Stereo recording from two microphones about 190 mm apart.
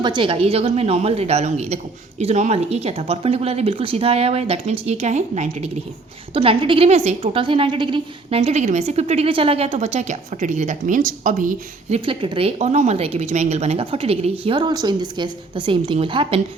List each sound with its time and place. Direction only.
0.0 s a woman's voice: 25° right (ahead or behind)